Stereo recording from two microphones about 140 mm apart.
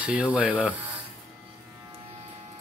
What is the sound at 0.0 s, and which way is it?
Speech, 10° right (ahead or behind).